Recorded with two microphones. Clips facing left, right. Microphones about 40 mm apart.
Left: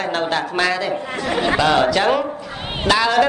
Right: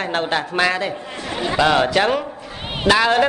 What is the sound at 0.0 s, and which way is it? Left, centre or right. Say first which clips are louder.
Speech: left 1 dB; centre.